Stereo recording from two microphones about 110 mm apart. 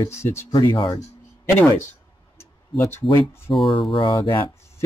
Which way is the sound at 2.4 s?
25° left (ahead or behind).